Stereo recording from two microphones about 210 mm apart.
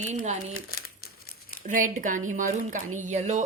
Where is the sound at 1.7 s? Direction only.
40° right (ahead or behind).